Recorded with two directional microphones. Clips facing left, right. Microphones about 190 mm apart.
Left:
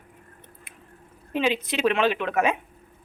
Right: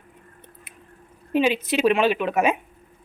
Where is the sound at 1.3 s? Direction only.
15° right (ahead or behind).